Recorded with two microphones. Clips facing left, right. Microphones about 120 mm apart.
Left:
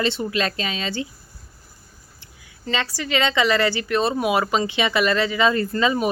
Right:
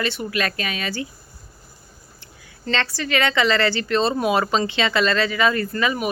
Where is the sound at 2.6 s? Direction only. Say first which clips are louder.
Right 1 dB; 10° left (ahead or behind).